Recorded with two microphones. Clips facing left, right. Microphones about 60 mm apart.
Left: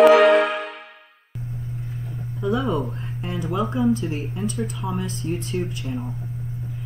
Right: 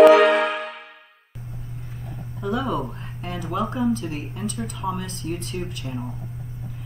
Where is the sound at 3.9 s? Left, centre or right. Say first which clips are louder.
Left 3 dB; left.